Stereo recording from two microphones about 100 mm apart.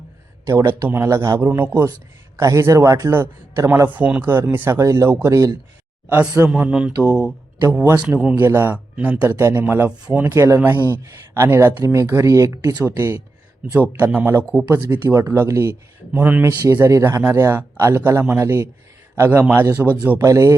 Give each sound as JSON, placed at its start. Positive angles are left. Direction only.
{"t": 0.8, "sound": "speech", "side_deg": -25}
{"t": 2.4, "sound": "a man's voice", "side_deg": -30}
{"t": 3.8, "sound": "speech", "side_deg": -15}
{"t": 6.1, "sound": "speech", "side_deg": -15}
{"t": 8.4, "sound": "speech", "side_deg": -25}
{"t": 8.7, "sound": "speech", "side_deg": -15}
{"t": 10.3, "sound": "speech", "side_deg": -30}
{"t": 10.8, "sound": "speech", "side_deg": 25}
{"t": 11.0, "sound": "speech", "side_deg": -25}
{"t": 16.1, "sound": "speech", "side_deg": -15}
{"t": 20.1, "sound": "a man's voice", "side_deg": -30}